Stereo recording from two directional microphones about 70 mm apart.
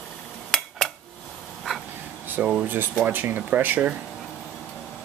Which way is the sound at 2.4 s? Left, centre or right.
Centre.